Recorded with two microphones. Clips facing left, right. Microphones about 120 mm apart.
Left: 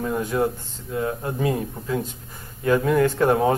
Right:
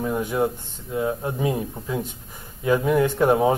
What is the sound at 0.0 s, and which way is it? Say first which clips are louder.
Speech: even; 15° right (ahead or behind).